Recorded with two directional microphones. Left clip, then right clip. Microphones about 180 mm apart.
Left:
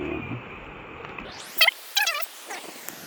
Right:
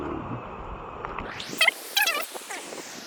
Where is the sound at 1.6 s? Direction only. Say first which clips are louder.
Left 1 dB; 5° left (ahead or behind).